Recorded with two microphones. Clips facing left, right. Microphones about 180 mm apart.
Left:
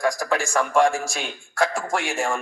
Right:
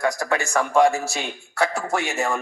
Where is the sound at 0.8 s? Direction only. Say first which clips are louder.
Right 2 dB; 5° right (ahead or behind).